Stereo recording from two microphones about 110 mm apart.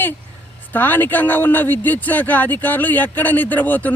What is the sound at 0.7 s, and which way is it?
Speech, 15° left (ahead or behind).